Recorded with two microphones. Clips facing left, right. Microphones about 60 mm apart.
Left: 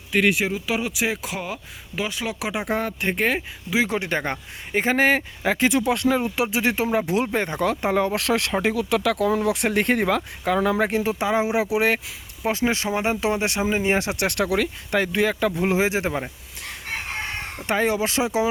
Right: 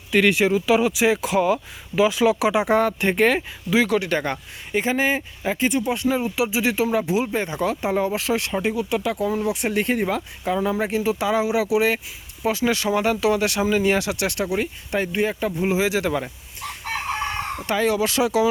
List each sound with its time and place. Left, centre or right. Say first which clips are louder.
0.1 s speech: right 3 dB; centre
3.8 s speech: right 3 dB; left
4.9 s speech: left 4 dB; left
6.1 s speech: even; left
11.2 s speech: even; left
12.6 s speech: right 3 dB; left
14.3 s speech: left 2 dB; left
15.8 s speech: right 1 dB; left
17.7 s speech: even; left